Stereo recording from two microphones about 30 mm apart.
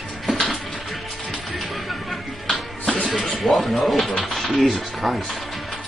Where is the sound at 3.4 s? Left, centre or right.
Centre.